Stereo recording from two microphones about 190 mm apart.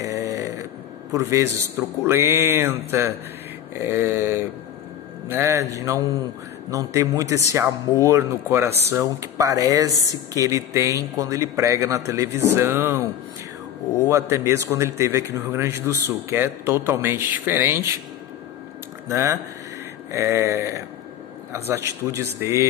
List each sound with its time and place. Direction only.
0.0 s a sound: 15° right (ahead or behind)
1.1 s a man's voice: 15° right (ahead or behind)
14.0 s a man's voice: 15° right (ahead or behind)
19.0 s a man's voice: 15° right (ahead or behind)